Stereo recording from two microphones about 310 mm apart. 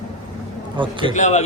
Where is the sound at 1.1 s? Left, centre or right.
Left.